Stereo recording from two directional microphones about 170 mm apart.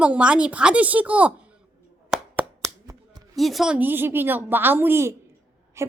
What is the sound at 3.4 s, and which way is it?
A woman's voice, centre (ahead or behind).